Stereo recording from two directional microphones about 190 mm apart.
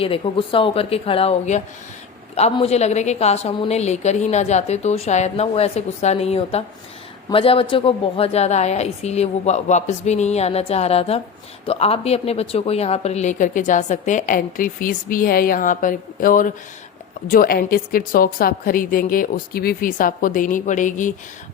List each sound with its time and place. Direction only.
0.0 s a woman's voice: 30° left (ahead or behind)